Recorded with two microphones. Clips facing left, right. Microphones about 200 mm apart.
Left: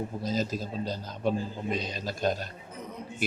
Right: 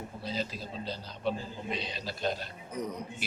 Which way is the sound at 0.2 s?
45° left (ahead or behind).